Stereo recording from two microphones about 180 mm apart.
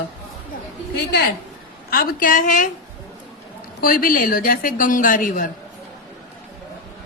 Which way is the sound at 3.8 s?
55° left (ahead or behind).